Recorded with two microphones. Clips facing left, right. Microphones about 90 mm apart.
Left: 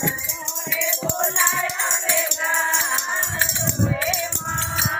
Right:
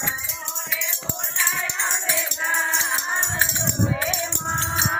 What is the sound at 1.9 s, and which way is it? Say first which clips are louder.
Music: left 3 dB; 10° right (ahead or behind).